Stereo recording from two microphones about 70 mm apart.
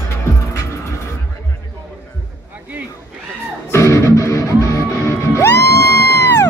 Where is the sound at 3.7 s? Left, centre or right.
Left.